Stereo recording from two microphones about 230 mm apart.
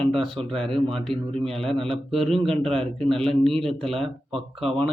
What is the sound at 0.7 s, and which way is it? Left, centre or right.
Speech, centre.